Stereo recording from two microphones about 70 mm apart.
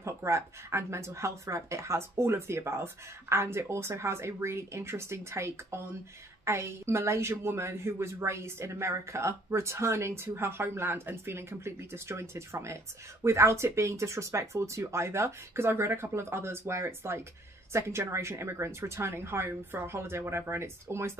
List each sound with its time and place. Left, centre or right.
0.0 s a woman's voice: right